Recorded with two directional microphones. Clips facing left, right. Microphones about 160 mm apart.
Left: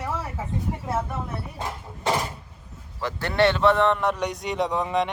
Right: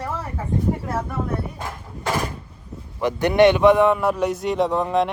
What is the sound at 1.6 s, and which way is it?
Speech, 20° left (ahead or behind).